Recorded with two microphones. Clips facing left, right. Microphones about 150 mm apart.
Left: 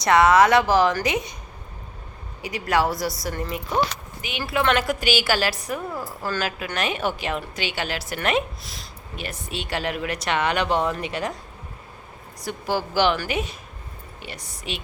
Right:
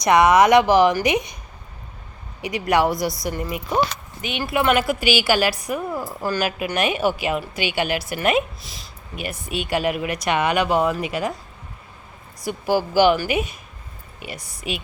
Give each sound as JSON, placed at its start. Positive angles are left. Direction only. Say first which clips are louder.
{"t": 0.0, "sound": "speech", "louder": "right 1 dB", "side_deg": -15}
{"t": 2.4, "sound": "speech", "louder": "right 3 dB", "side_deg": -20}
{"t": 9.1, "sound": "speech", "louder": "right 4 dB", "side_deg": -10}
{"t": 12.5, "sound": "speech", "louder": "right 5 dB", "side_deg": -10}